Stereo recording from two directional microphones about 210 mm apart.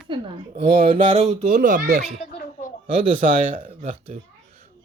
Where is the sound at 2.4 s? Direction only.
40° left (ahead or behind).